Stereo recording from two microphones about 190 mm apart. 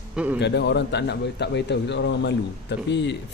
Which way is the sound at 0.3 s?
65° left (ahead or behind).